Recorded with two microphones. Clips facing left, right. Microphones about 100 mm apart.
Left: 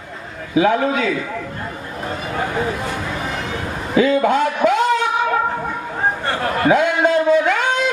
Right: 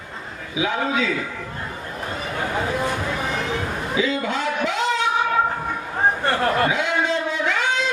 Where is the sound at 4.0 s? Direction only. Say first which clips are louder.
Left 9 dB; 50° left (ahead or behind).